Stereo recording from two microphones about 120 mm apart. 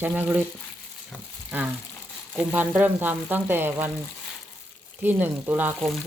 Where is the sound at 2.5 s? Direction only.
15° right (ahead or behind).